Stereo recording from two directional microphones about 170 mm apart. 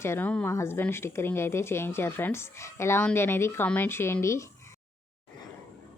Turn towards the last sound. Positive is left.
turn(degrees=15)  # may be behind; listen again after turning